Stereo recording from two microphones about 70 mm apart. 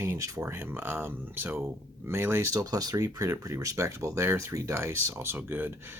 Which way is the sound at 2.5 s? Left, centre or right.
Right.